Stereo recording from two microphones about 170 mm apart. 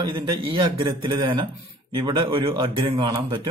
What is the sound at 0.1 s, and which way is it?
Speech, 30° right (ahead or behind).